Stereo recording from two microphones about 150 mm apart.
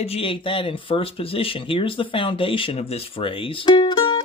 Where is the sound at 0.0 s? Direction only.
40° left (ahead or behind).